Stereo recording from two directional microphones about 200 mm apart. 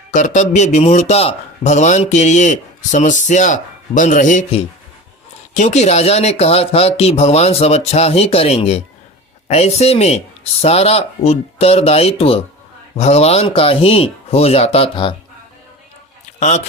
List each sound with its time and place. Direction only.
0.1 s speech: 40° left (ahead or behind)